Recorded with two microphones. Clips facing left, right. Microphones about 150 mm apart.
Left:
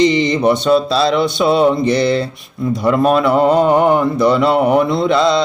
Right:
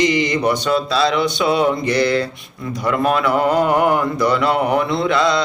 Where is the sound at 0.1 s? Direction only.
25° left (ahead or behind).